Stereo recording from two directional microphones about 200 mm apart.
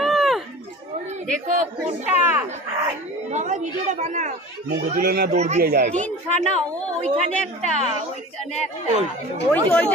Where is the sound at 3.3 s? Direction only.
35° right (ahead or behind).